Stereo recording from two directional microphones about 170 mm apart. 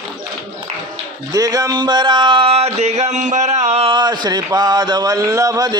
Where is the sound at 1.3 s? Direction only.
20° right (ahead or behind).